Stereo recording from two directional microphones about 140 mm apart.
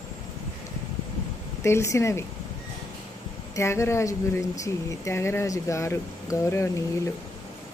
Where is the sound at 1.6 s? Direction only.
20° left (ahead or behind).